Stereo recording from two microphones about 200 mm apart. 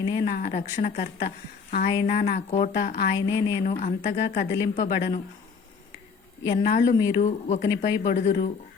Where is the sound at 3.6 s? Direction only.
40° left (ahead or behind).